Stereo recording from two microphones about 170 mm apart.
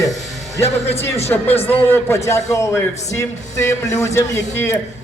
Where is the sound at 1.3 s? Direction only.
10° left (ahead or behind).